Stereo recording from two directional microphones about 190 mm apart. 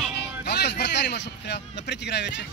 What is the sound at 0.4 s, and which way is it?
A man's voice, 60° left (ahead or behind).